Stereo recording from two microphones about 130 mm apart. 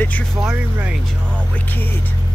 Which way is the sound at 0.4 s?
10° right (ahead or behind).